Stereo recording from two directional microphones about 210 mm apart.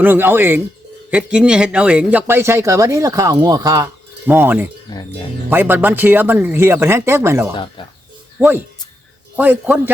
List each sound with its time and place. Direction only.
0.0 s speech: 10° right (ahead or behind)
4.9 s speech: 20° left (ahead or behind)
5.5 s speech: 10° right (ahead or behind)
7.8 s speech: 25° left (ahead or behind)
8.4 s speech: 10° right (ahead or behind)